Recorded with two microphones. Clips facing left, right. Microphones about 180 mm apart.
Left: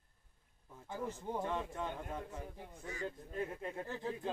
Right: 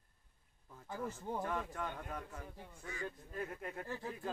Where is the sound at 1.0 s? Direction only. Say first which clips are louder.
Left 1 dB; 20° left (ahead or behind).